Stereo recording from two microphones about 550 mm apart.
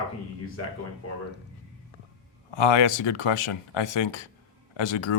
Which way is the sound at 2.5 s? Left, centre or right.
Left.